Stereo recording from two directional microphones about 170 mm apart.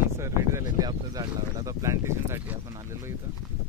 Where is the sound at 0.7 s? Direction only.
20° right (ahead or behind).